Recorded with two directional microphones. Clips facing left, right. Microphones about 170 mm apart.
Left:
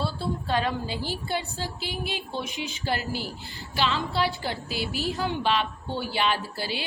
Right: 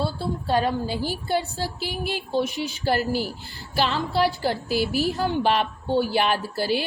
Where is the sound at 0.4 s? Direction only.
45° right (ahead or behind).